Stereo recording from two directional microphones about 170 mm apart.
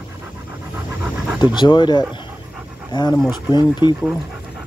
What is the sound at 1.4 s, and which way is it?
Speech, 25° left (ahead or behind).